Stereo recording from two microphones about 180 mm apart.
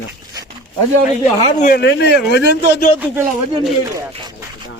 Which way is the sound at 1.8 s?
70° left (ahead or behind).